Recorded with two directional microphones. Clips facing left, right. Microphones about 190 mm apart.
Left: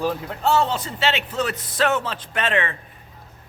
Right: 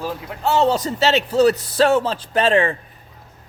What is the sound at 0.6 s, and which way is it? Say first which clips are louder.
A man's voice: right 6 dB; 40° right (ahead or behind).